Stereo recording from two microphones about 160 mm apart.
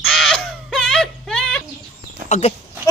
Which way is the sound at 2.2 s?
50° left (ahead or behind).